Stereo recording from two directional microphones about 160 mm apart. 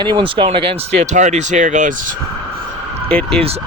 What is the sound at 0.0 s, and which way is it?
Speech, 30° right (ahead or behind).